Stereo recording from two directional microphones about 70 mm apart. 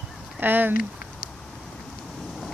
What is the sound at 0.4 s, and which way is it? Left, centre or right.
Speech, right.